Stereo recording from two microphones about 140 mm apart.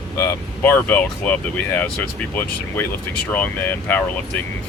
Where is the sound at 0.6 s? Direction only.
15° left (ahead or behind).